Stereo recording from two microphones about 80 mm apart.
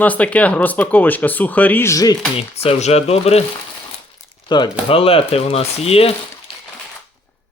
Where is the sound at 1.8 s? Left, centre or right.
Left.